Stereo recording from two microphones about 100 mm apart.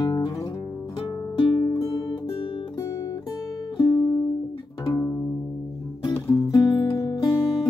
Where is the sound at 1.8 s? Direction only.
35° left (ahead or behind).